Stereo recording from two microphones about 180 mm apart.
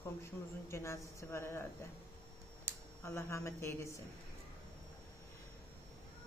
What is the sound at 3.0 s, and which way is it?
Speech, 15° left (ahead or behind).